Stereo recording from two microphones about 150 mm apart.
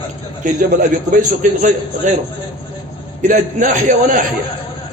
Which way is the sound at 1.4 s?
55° right (ahead or behind).